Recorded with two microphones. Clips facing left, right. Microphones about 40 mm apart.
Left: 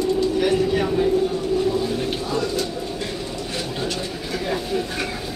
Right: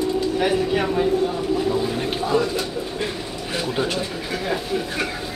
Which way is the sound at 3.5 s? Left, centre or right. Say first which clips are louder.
Right 5 dB; centre.